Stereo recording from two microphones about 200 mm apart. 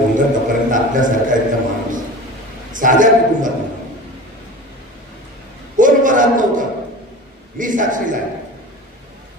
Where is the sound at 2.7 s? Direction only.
40° right (ahead or behind).